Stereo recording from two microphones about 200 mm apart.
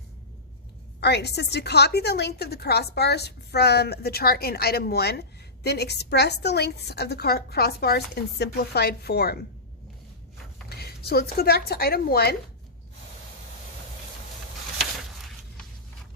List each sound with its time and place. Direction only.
0.9 s a woman's voice: 55° left (ahead or behind)
10.7 s speech: 50° left (ahead or behind)